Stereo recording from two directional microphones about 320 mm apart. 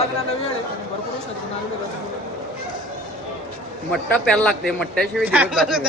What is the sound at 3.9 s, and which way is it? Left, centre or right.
Speech, centre.